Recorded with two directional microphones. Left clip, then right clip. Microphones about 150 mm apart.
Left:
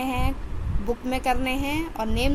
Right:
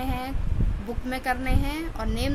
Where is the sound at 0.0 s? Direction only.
15° left (ahead or behind).